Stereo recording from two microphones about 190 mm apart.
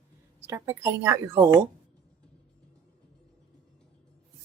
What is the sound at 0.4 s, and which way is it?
Speech, 15° right (ahead or behind).